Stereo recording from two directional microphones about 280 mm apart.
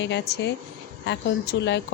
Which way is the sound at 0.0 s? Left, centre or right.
Left.